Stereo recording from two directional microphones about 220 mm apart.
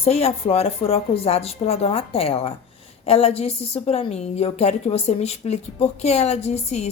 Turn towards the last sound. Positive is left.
turn(degrees=30)  # may be behind; listen again after turning